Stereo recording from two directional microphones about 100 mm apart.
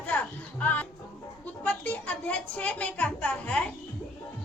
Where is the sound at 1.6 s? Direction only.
15° left (ahead or behind).